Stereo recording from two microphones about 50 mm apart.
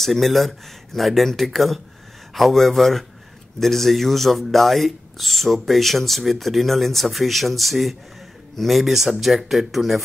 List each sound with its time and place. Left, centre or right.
0.0 s speech: centre